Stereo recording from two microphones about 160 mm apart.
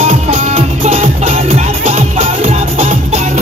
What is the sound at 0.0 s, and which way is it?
Music, 40° right (ahead or behind).